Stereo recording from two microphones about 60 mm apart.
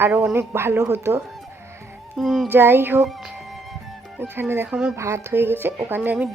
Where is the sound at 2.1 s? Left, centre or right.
Centre.